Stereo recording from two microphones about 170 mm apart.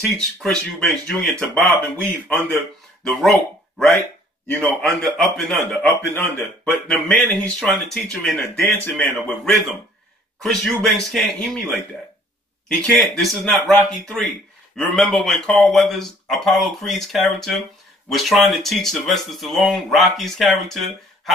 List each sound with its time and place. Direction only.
0.4 s speech: 5° left (ahead or behind)
12.7 s speech: 5° left (ahead or behind)